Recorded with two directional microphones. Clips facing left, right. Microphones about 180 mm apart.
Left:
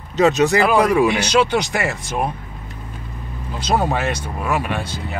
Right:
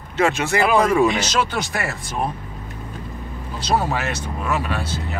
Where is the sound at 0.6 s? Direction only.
Centre (ahead or behind); by 2.0 s 15° left (ahead or behind).